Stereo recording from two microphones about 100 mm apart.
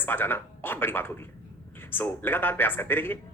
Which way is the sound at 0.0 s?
20° left (ahead or behind).